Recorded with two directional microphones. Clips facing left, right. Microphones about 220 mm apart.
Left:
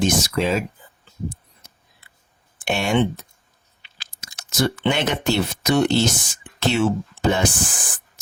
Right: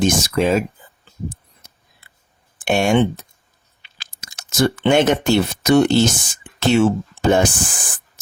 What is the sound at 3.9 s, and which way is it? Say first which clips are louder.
Speech: right 1 dB; 50° right (ahead or behind).